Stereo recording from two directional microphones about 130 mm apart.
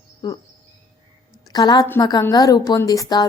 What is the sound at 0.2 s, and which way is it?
Speech, 35° left (ahead or behind).